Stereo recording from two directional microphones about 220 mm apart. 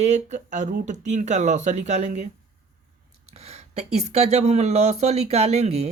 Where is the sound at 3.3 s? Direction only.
30° right (ahead or behind).